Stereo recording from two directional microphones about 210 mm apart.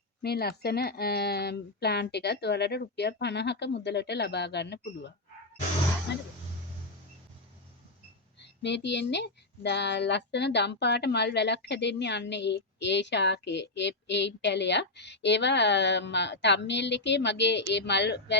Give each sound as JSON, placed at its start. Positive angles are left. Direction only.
{"t": 0.2, "sound": "speech", "side_deg": 50}
{"t": 8.4, "sound": "speech", "side_deg": 55}